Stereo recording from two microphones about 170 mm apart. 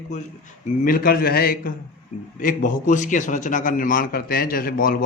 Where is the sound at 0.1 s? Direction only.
50° left (ahead or behind).